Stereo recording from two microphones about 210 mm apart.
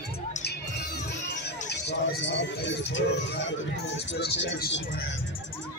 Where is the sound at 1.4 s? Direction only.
50° left (ahead or behind).